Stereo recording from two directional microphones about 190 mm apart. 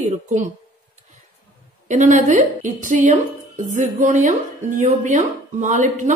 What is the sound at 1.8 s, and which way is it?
A woman's voice, 40° right (ahead or behind).